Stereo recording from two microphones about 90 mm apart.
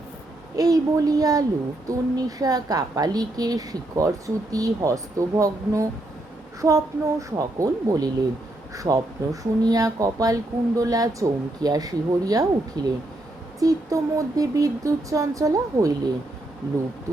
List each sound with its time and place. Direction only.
0.5 s a woman's voice: 40° right (ahead or behind)